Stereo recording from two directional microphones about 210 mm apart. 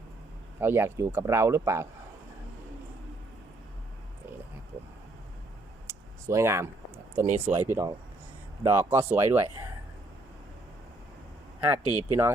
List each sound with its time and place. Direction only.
0.6 s speech: 10° right (ahead or behind)
5.9 s a sound: 15° right (ahead or behind)
7.2 s speech: 10° right (ahead or behind)
11.6 s speech: 10° right (ahead or behind)